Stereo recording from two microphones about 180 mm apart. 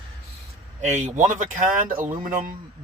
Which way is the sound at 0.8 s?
40° right (ahead or behind).